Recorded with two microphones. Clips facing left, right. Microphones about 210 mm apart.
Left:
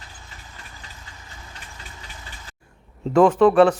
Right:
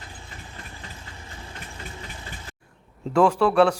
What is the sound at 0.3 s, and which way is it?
Vehicle, 35° right (ahead or behind).